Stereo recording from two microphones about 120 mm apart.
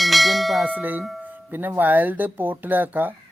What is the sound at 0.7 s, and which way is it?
Speech, 15° right (ahead or behind).